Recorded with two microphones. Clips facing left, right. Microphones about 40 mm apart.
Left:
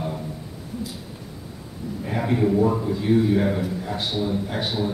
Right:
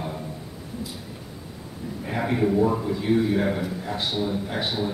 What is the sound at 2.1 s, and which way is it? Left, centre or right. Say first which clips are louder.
A man's voice: left 2 dB; centre.